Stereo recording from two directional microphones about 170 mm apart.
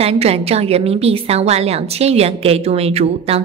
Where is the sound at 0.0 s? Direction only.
35° right (ahead or behind).